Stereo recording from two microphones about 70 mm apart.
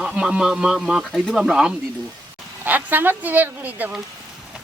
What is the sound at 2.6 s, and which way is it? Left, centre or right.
A woman's voice, right.